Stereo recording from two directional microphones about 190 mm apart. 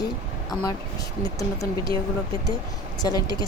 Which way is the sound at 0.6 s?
20° left (ahead or behind).